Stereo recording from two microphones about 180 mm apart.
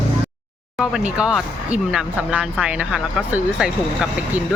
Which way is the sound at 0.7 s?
5° right (ahead or behind).